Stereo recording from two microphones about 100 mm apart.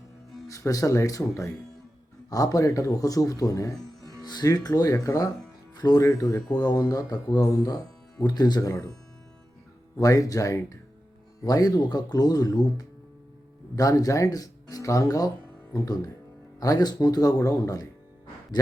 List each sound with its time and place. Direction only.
0.4 s speech: 35° left (ahead or behind)
10.0 s speech: 35° left (ahead or behind)